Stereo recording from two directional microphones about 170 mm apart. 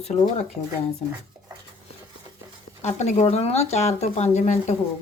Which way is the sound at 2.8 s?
40° left (ahead or behind).